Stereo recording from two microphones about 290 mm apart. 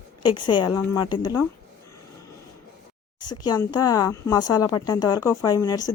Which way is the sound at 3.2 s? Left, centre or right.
Centre.